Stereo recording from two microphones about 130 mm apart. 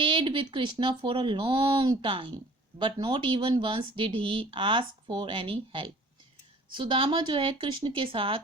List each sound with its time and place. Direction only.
0.0 s speech: 40° right (ahead or behind)